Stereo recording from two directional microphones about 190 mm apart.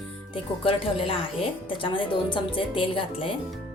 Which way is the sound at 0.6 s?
30° left (ahead or behind).